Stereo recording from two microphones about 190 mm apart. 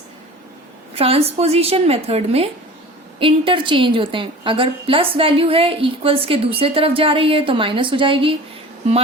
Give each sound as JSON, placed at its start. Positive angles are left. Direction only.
{"t": 0.9, "sound": "a woman's voice", "side_deg": -30}